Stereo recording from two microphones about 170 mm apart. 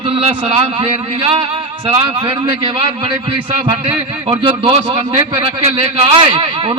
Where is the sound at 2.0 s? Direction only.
35° right (ahead or behind).